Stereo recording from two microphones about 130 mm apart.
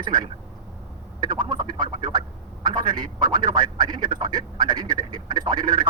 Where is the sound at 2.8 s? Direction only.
35° right (ahead or behind).